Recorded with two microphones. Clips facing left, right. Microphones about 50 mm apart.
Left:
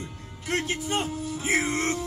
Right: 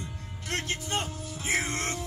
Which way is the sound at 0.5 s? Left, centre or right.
Centre.